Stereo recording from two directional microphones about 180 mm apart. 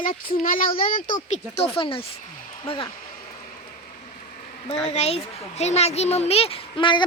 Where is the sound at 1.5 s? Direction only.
30° left (ahead or behind).